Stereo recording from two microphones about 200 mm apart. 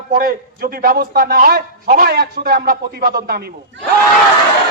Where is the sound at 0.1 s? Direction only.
50° right (ahead or behind).